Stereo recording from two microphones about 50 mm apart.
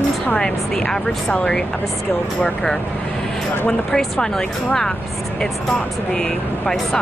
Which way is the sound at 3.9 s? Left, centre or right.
Centre.